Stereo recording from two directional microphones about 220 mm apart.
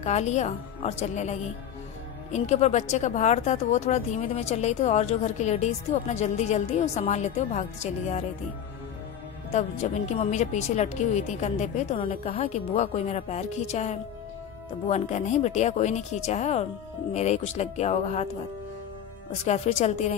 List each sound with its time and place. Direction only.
0.0 s speech: 30° left (ahead or behind)
9.5 s speech: 30° left (ahead or behind)
19.4 s speech: 30° left (ahead or behind)